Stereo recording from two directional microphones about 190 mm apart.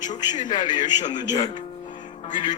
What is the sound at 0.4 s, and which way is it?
Speech, 20° left (ahead or behind).